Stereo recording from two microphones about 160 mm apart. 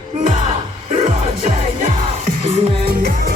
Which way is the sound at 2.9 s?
55° right (ahead or behind).